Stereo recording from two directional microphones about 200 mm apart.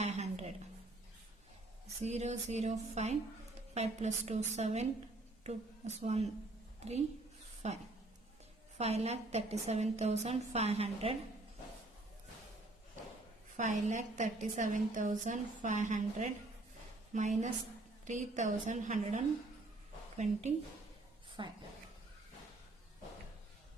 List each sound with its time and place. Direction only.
0.0 s a sound: 35° right (ahead or behind)
2.0 s a woman's voice: 35° right (ahead or behind)
6.7 s a sound: 35° right (ahead or behind)
7.6 s a woman's voice: 35° right (ahead or behind)
8.8 s a woman's voice: 30° right (ahead or behind)
13.6 s a woman's voice: 40° right (ahead or behind)
21.4 s a woman's voice: 25° right (ahead or behind)